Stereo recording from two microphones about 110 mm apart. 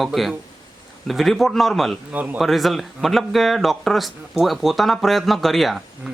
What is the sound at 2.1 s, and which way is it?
Speech, 15° right (ahead or behind).